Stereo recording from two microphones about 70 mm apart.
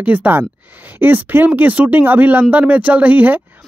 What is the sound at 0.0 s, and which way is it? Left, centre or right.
Speech, right.